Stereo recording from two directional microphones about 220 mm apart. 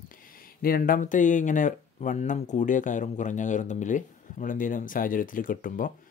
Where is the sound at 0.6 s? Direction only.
40° left (ahead or behind).